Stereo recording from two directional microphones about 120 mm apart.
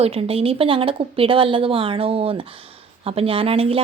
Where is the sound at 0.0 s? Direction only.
55° right (ahead or behind).